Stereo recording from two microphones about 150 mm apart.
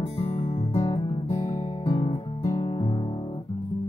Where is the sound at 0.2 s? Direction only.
35° left (ahead or behind).